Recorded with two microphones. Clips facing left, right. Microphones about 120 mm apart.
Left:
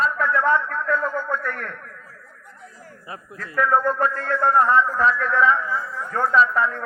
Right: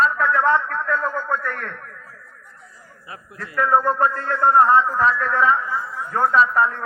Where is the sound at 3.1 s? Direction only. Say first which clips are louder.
Even; 30° left (ahead or behind).